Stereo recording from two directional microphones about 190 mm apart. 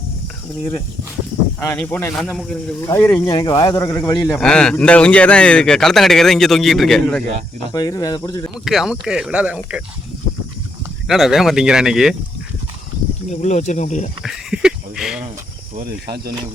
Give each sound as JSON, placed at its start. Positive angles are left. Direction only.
{"t": 1.7, "sound": "speech", "side_deg": 10}
{"t": 2.8, "sound": "speech", "side_deg": 15}
{"t": 4.3, "sound": "speech", "side_deg": 0}
{"t": 7.7, "sound": "speech", "side_deg": 20}
{"t": 8.6, "sound": "speech", "side_deg": 0}
{"t": 11.1, "sound": "speech", "side_deg": 0}
{"t": 13.3, "sound": "speech", "side_deg": 35}
{"t": 14.3, "sound": "a sound", "side_deg": -5}
{"t": 15.7, "sound": "speech", "side_deg": -50}